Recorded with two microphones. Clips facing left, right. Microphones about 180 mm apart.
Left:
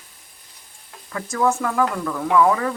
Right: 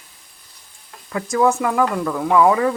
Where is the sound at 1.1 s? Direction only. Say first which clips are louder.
Right 4 dB; 15° right (ahead or behind).